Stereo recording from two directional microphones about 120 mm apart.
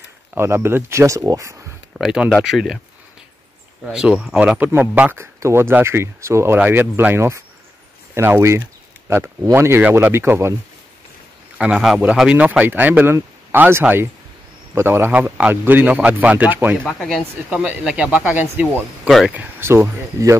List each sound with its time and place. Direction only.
0.3 s speech: 20° right (ahead or behind)
2.0 s speech: 5° right (ahead or behind)
3.8 s speech: 5° right (ahead or behind)
11.5 s speech: 5° right (ahead or behind)
19.0 s speech: centre (ahead or behind)
19.3 s speech: 20° right (ahead or behind)